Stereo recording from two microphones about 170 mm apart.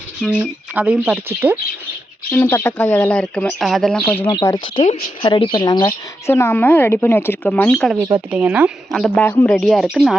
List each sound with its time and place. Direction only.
0.2 s speech: 10° right (ahead or behind)
2.3 s speech: 10° left (ahead or behind)
4.3 s speech: 25° left (ahead or behind); by 7.9 s 5° left (ahead or behind)
7.9 s speech: 20° right (ahead or behind)
8.3 s speech: 5° right (ahead or behind)
8.9 s speech: 5° left (ahead or behind)